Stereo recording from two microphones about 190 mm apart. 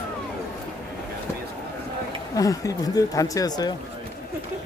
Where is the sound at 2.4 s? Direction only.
20° left (ahead or behind).